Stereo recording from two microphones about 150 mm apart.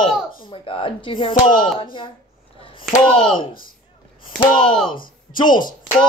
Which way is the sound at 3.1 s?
35° left (ahead or behind).